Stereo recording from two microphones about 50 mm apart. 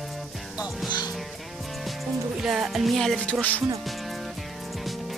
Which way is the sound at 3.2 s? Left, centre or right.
Left.